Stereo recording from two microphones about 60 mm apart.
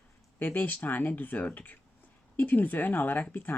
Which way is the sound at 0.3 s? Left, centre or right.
Left.